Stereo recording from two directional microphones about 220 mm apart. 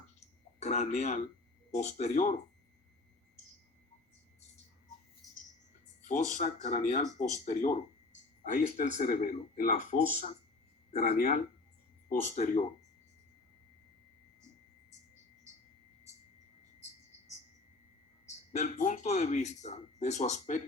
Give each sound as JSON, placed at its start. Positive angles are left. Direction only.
{"t": 0.6, "sound": "speech", "side_deg": 30}
{"t": 6.1, "sound": "speech", "side_deg": 35}
{"t": 18.3, "sound": "speech", "side_deg": 35}